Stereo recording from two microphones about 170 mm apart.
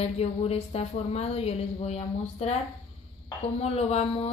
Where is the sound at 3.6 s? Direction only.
40° left (ahead or behind).